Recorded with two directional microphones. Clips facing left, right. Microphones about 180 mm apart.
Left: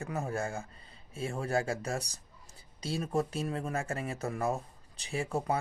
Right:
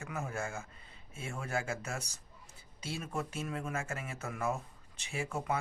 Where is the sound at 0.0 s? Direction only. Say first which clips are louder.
Left 4 dB; 35° left (ahead or behind).